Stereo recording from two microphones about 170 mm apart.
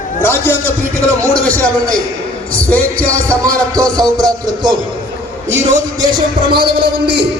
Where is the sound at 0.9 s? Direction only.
15° right (ahead or behind).